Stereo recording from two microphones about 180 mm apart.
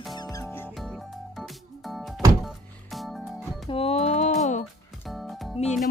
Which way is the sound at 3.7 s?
30° left (ahead or behind).